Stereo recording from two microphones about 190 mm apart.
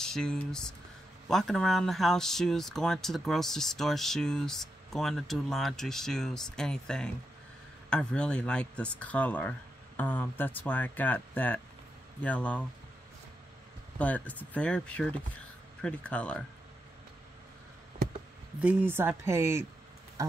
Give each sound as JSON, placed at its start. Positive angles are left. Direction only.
{"t": 0.0, "sound": "speech", "side_deg": 5}
{"t": 13.9, "sound": "speech", "side_deg": 5}
{"t": 18.6, "sound": "speech", "side_deg": -10}
{"t": 20.2, "sound": "a sound", "side_deg": -15}